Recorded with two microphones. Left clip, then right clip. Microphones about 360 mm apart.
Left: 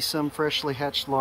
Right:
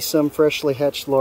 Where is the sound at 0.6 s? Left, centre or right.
Right.